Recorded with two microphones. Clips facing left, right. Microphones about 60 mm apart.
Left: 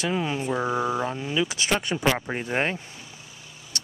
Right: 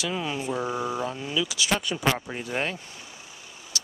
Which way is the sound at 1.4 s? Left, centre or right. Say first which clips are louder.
Left 1 dB; left.